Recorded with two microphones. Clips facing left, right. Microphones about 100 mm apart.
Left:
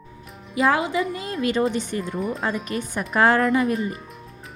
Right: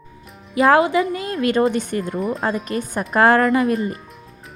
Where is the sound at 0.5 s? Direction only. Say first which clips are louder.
Right 6 dB; 60° right (ahead or behind).